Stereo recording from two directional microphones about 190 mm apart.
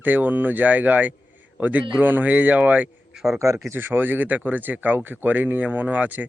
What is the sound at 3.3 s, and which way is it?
Speech, 15° right (ahead or behind).